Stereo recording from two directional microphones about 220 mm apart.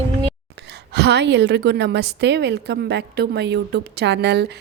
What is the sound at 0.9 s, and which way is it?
A woman's voice, 50° right (ahead or behind).